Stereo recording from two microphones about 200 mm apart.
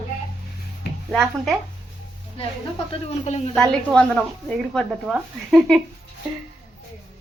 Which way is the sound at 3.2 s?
35° left (ahead or behind).